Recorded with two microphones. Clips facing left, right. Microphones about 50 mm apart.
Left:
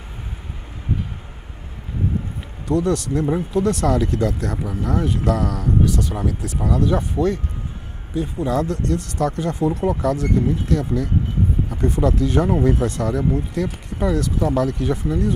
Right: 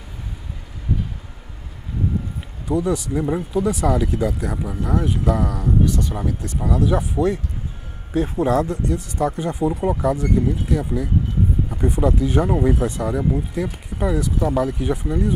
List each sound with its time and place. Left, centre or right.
2.6 s speech: centre
8.5 s speech: centre